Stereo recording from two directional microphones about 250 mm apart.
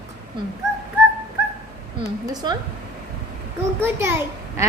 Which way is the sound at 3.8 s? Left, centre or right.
Centre.